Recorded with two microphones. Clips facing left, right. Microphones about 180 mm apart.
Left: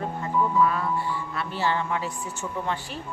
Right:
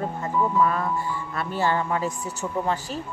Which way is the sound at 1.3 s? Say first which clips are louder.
Right 4 dB; 45° right (ahead or behind).